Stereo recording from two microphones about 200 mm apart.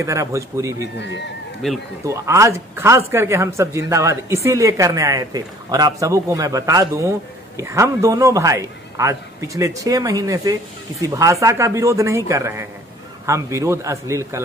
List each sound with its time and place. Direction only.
0.0 s a man's voice: 15° right (ahead or behind)
1.6 s speech: centre (ahead or behind)
2.0 s a man's voice: 15° right (ahead or behind)